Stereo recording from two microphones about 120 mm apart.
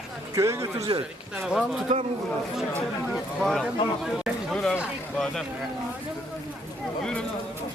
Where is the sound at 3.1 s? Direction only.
Centre (ahead or behind).